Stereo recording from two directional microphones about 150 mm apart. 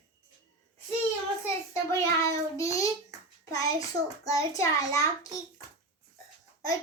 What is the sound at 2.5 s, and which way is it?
Speech, 20° left (ahead or behind).